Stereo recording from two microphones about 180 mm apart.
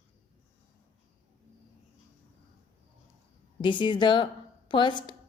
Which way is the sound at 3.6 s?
25° left (ahead or behind).